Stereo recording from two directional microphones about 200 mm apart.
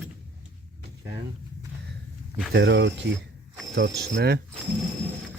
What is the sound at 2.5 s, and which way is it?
Speech, 65° right (ahead or behind).